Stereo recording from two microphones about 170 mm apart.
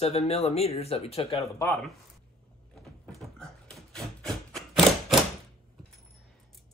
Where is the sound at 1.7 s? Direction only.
Centre (ahead or behind).